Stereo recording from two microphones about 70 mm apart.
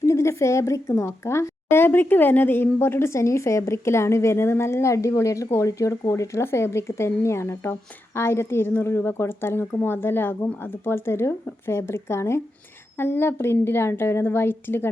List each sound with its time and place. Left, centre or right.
0.0 s a woman's voice: left
6.4 s a woman's voice: left